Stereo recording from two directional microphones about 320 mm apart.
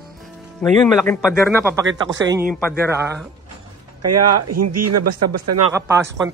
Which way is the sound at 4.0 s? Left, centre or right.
Right.